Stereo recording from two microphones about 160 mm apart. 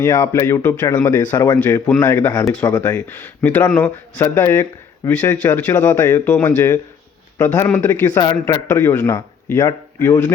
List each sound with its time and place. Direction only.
0.0 s a man's voice: 15° left (ahead or behind)